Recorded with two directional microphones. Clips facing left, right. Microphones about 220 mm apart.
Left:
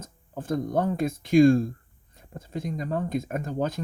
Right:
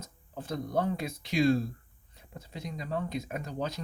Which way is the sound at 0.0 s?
50° left (ahead or behind).